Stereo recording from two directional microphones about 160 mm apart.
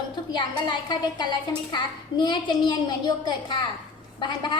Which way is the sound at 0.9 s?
25° left (ahead or behind).